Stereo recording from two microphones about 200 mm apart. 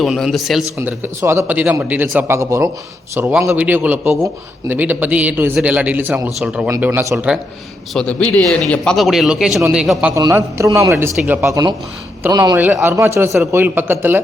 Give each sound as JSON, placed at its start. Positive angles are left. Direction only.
{"t": 0.0, "sound": "a man's voice", "side_deg": 0}
{"t": 0.8, "sound": "a man's voice", "side_deg": -10}
{"t": 7.9, "sound": "a man's voice", "side_deg": 5}
{"t": 10.2, "sound": "a man's voice", "side_deg": -15}